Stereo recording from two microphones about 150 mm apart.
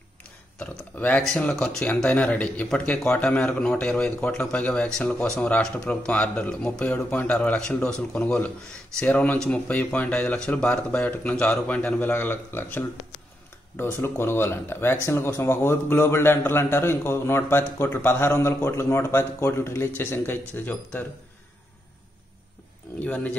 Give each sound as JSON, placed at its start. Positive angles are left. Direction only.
{"t": 0.6, "sound": "speech", "side_deg": 5}
{"t": 22.9, "sound": "speech", "side_deg": 10}